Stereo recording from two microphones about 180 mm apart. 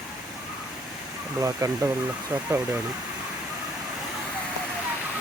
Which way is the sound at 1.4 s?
20° right (ahead or behind).